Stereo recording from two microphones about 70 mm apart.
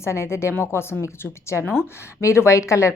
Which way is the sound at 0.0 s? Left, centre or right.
Left.